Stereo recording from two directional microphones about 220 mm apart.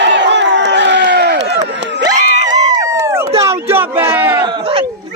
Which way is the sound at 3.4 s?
10° right (ahead or behind).